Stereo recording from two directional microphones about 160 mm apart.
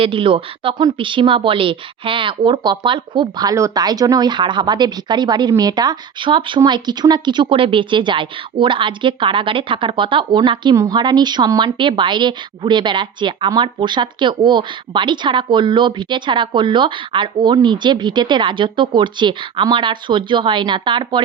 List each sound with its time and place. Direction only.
0.0 s a woman's voice: 30° right (ahead or behind)